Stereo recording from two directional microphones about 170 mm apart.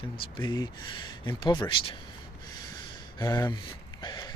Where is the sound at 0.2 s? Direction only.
25° left (ahead or behind).